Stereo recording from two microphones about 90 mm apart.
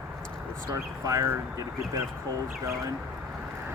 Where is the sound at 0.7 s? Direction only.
35° right (ahead or behind).